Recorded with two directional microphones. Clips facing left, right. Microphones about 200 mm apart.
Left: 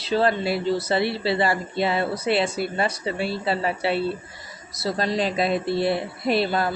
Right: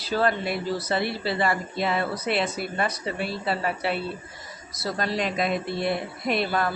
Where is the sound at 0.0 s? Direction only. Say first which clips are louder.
Left 3 dB; 25° left (ahead or behind).